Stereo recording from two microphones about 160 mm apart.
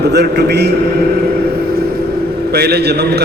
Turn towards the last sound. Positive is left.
turn(degrees=-90)